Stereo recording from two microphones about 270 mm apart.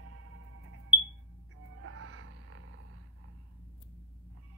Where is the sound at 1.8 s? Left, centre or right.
Right.